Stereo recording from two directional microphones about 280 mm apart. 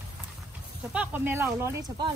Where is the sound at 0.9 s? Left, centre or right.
Centre.